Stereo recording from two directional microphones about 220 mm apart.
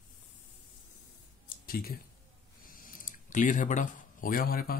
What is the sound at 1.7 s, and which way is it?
Speech, 45° left (ahead or behind).